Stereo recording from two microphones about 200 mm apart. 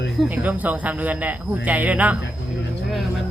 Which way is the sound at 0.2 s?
10° right (ahead or behind).